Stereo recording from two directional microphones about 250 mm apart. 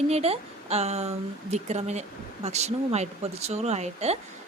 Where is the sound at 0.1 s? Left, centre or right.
Right.